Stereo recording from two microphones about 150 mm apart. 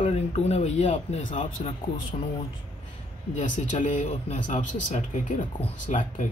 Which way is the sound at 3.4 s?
60° left (ahead or behind).